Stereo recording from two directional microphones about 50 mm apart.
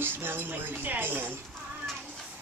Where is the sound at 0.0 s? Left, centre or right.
Right.